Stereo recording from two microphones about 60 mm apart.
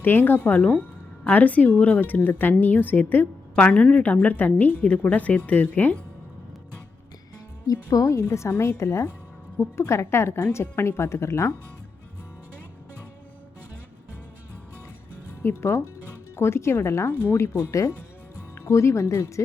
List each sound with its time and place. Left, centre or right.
0.0 s a woman's voice: left
3.5 s a woman's voice: left
7.7 s a woman's voice: left
15.4 s a woman's voice: left
17.5 s speech: left
18.6 s a woman's voice: left